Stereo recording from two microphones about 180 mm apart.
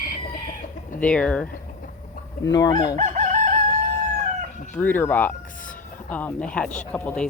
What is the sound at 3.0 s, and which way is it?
Chicken, 40° right (ahead or behind).